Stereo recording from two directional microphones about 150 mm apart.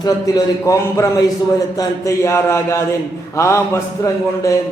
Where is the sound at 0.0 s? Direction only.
25° left (ahead or behind).